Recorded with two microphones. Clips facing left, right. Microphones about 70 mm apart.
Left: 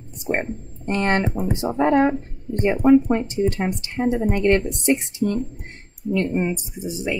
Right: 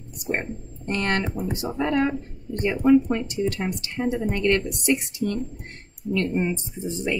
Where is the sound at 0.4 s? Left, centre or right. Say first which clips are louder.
Left 4 dB; left.